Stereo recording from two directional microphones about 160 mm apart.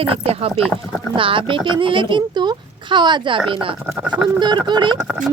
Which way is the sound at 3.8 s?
10° right (ahead or behind).